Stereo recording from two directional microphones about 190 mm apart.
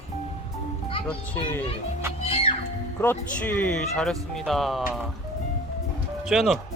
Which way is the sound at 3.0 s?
10° left (ahead or behind).